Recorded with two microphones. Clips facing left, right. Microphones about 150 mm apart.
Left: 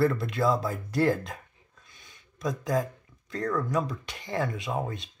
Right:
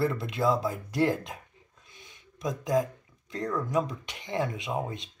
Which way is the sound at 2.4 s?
15° right (ahead or behind).